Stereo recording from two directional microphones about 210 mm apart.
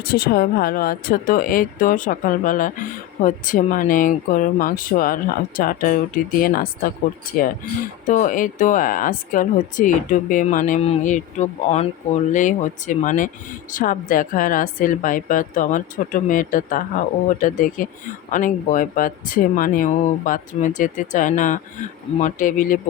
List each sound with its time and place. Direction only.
0.0 s speech: 45° left (ahead or behind)